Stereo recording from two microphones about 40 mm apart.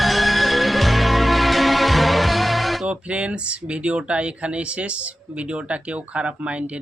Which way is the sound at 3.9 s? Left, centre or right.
Right.